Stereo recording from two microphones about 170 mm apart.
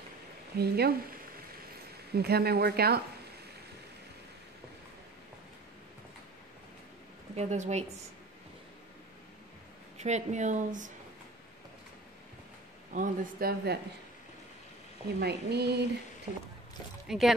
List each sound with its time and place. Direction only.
0.6 s speech: 70° right (ahead or behind)
2.1 s speech: 70° right (ahead or behind)
7.3 s speech: 45° right (ahead or behind)
9.9 s speech: 40° right (ahead or behind)
12.9 s speech: 50° right (ahead or behind)
15.1 s speech: 70° right (ahead or behind)
16.3 s a sound: 40° right (ahead or behind)
17.1 s speech: centre (ahead or behind)